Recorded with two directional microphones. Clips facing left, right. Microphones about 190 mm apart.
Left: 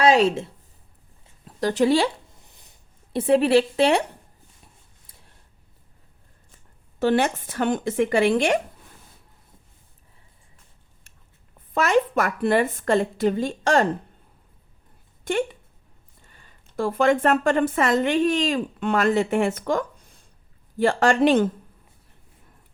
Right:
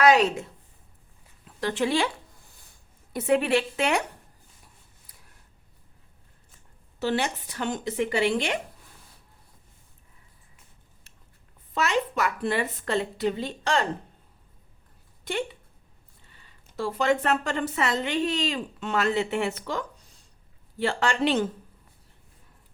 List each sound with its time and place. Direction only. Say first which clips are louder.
0.0 s speech: left 2 dB; 30° left (ahead or behind)
1.5 s speech: left 7 dB; 40° left (ahead or behind)
2.3 s a sound: left 2 dB; 20° left (ahead or behind)
7.0 s speech: left 6 dB; 50° left (ahead or behind)
11.7 s speech: left 6 dB; 50° left (ahead or behind)
15.2 s a sound: left 6 dB; 50° left (ahead or behind)
16.2 s speech: left 3 dB; 50° left (ahead or behind)